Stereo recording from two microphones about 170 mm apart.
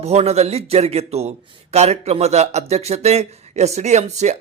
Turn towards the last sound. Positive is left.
turn(degrees=-40)  # may be behind; listen again after turning